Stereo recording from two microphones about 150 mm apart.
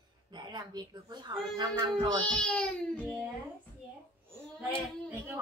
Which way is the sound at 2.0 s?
5° left (ahead or behind).